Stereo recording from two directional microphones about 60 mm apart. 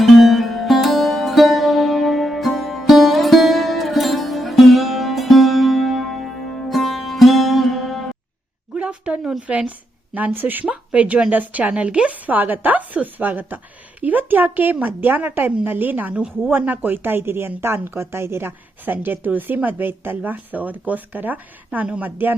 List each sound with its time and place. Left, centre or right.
0.0 s music: centre
8.7 s a sound: centre
9.5 s a woman's voice: right